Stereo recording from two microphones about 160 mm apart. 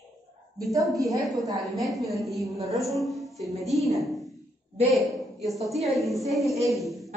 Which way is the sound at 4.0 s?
Centre (ahead or behind).